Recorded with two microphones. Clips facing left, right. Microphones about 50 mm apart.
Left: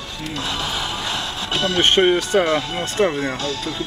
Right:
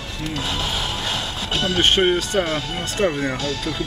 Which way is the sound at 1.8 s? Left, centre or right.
Centre.